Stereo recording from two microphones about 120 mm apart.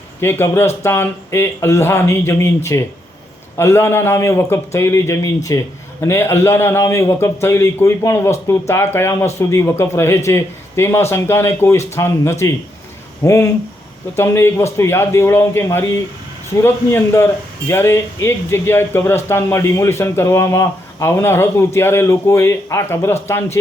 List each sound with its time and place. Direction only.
0.2 s a man's voice: 20° left (ahead or behind)